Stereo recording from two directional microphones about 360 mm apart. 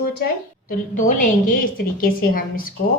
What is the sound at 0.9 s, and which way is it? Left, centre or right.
A woman's voice, left.